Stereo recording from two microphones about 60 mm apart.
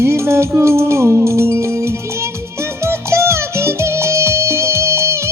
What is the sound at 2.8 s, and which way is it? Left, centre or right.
Music, right.